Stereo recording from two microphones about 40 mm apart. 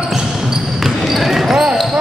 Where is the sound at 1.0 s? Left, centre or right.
Centre.